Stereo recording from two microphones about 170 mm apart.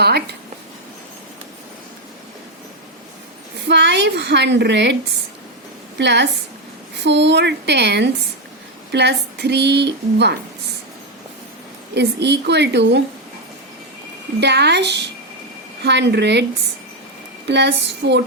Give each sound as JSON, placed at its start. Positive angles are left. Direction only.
{"t": 3.7, "sound": "speech", "side_deg": -90}
{"t": 6.0, "sound": "speech", "side_deg": -90}
{"t": 11.9, "sound": "speech", "side_deg": -90}
{"t": 14.4, "sound": "speech", "side_deg": -80}
{"t": 17.5, "sound": "speech", "side_deg": -80}